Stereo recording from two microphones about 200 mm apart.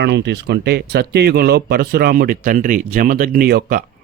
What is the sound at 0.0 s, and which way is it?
Speech, 60° right (ahead or behind).